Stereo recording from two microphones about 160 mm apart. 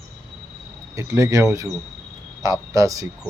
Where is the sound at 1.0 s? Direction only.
20° right (ahead or behind).